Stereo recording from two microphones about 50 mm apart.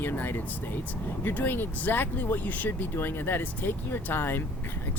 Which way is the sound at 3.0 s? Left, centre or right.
Left.